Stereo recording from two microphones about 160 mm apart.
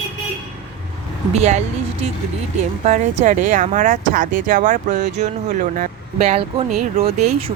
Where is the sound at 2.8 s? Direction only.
50° right (ahead or behind).